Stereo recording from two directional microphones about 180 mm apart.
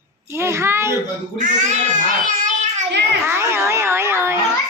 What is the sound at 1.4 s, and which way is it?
A child's voice, 45° right (ahead or behind).